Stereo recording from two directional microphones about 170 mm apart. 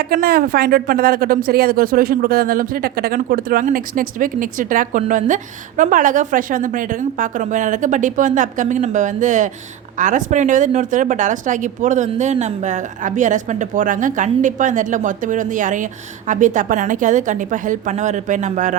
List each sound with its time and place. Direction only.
0.0 s speech: 60° right (ahead or behind)